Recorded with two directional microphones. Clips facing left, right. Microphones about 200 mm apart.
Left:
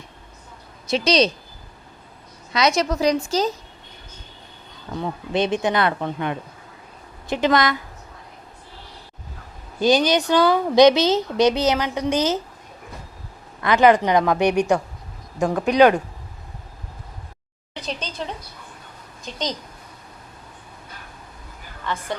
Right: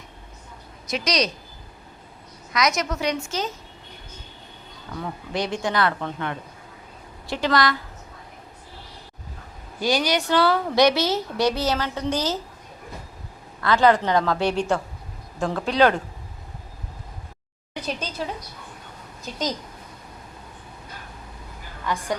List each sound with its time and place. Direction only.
0.9 s speech: 30° left (ahead or behind)
2.5 s a woman's voice: 30° left (ahead or behind)
4.9 s speech: 25° left (ahead or behind)
9.8 s speech: 20° left (ahead or behind)
13.6 s speech: 20° left (ahead or behind)
17.7 s a woman's voice: 10° right (ahead or behind)
19.2 s a woman's voice: 5° right (ahead or behind)
21.9 s a woman's voice: 10° right (ahead or behind)